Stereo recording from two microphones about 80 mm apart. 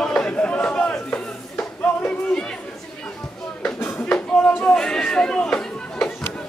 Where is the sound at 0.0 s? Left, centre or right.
Centre.